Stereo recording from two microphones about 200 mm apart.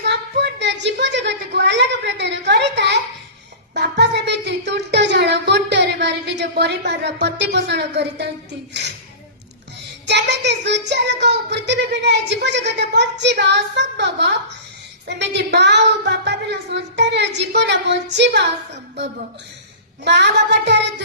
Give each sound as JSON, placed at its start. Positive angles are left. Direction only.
{"t": 0.0, "sound": "a woman's voice", "side_deg": -55}
{"t": 3.8, "sound": "a sound", "side_deg": -60}
{"t": 10.1, "sound": "speech", "side_deg": -60}
{"t": 20.1, "sound": "speech", "side_deg": -55}